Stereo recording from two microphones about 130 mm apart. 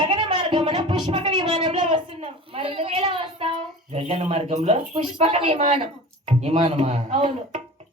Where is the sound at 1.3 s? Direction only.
35° right (ahead or behind).